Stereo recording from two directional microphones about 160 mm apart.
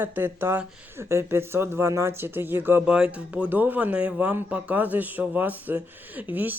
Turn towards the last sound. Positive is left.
turn(degrees=-10)  # may be behind; listen again after turning